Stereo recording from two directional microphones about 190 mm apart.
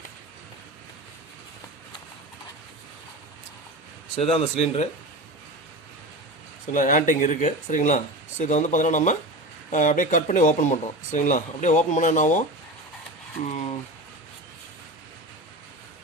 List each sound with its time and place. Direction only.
4.2 s speech: 30° left (ahead or behind)
6.7 s speech: 45° left (ahead or behind)